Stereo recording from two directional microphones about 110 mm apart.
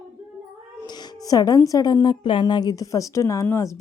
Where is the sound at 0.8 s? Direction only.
40° left (ahead or behind).